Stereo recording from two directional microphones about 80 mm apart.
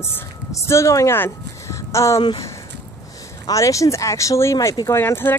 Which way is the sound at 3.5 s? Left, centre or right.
Left.